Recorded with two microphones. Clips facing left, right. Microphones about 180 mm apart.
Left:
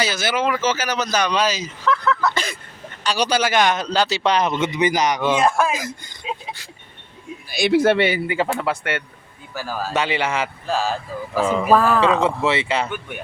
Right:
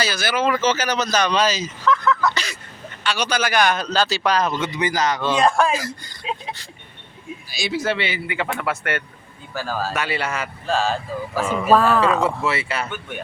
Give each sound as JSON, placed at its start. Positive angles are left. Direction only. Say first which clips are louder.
{"t": 0.0, "sound": "speech", "louder": "even", "side_deg": 20}
{"t": 0.5, "sound": "speech", "louder": "right 1 dB", "side_deg": 10}
{"t": 2.3, "sound": "throat clearing", "louder": "left 3 dB", "side_deg": 50}
{"t": 3.0, "sound": "speech", "louder": "left 3 dB", "side_deg": 35}
{"t": 5.4, "sound": "speech", "louder": "right 4 dB", "side_deg": 5}
{"t": 7.5, "sound": "speech", "louder": "left 8 dB", "side_deg": 60}
{"t": 8.1, "sound": "a man's voice", "louder": "left 5 dB", "side_deg": 40}
{"t": 8.4, "sound": "speech", "louder": "left 2 dB", "side_deg": 25}
{"t": 9.6, "sound": "speech", "louder": "left 1 dB", "side_deg": 15}
{"t": 11.7, "sound": "speech", "louder": "right 1 dB", "side_deg": 0}
{"t": 12.4, "sound": "speech", "louder": "left 4 dB", "side_deg": 20}
{"t": 12.9, "sound": "speech", "louder": "left 1 dB", "side_deg": 10}